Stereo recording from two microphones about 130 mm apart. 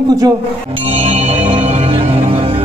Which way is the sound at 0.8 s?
55° right (ahead or behind).